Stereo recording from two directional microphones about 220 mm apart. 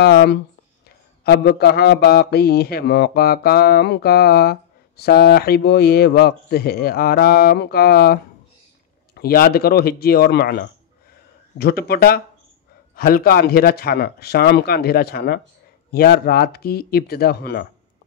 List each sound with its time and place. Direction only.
0.0 s speech: 50° left (ahead or behind)